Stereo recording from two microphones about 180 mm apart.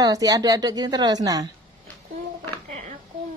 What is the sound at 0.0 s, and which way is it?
A woman's voice, 20° right (ahead or behind).